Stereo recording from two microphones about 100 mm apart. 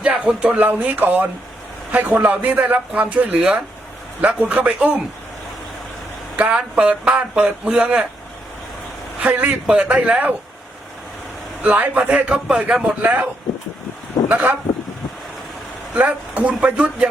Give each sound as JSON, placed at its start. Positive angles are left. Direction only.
{"t": 0.0, "sound": "a man's voice", "side_deg": -10}
{"t": 6.3, "sound": "a man's voice", "side_deg": -10}
{"t": 9.2, "sound": "a man's voice", "side_deg": -15}
{"t": 11.6, "sound": "a man's voice", "side_deg": -15}
{"t": 14.3, "sound": "speech", "side_deg": -15}
{"t": 16.0, "sound": "a man's voice", "side_deg": -15}